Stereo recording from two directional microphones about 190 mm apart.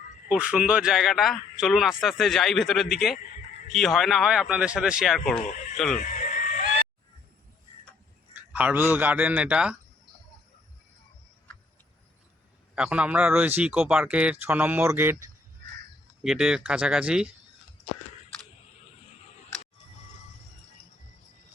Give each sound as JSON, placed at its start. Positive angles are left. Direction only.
{"t": 0.3, "sound": "a man's voice", "side_deg": -5}
{"t": 6.0, "sound": "honk", "side_deg": 45}
{"t": 8.3, "sound": "a man's voice", "side_deg": -10}
{"t": 12.7, "sound": "a man's voice", "side_deg": -5}